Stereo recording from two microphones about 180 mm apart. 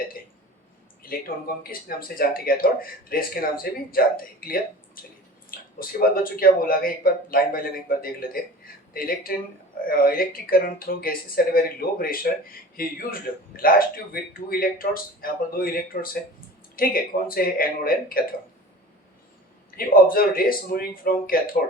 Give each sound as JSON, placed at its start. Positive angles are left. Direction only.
{"t": 1.0, "sound": "speech", "side_deg": 55}
{"t": 19.7, "sound": "speech", "side_deg": 55}